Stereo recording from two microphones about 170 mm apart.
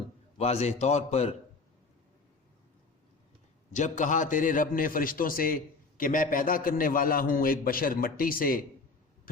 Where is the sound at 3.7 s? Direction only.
45° left (ahead or behind).